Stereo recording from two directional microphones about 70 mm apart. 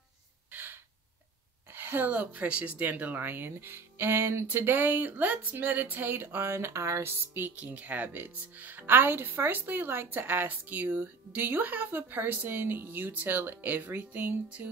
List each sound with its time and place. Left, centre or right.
0.5 s gasp: right
1.7 s speech: right
7.5 s speech: right